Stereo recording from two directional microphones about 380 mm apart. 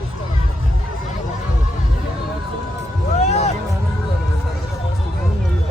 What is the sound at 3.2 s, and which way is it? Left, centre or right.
Music, centre.